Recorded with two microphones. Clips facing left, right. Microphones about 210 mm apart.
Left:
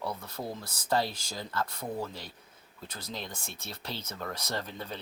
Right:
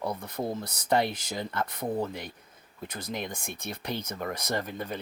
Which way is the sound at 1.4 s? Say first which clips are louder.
Right 2 dB; 20° right (ahead or behind).